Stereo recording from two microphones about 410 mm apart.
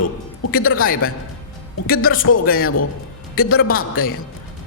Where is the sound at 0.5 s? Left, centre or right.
Left.